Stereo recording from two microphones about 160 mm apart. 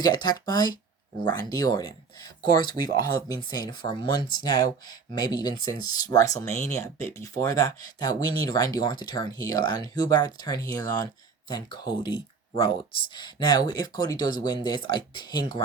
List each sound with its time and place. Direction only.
0.0 s speech: 25° left (ahead or behind)